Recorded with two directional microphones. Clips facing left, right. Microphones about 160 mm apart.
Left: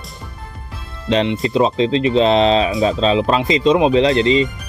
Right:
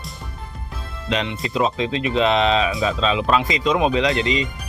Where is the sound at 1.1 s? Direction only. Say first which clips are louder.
Left 7 dB; 30° left (ahead or behind).